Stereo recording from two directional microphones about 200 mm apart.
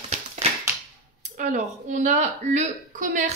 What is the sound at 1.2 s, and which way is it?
Speech, 40° right (ahead or behind).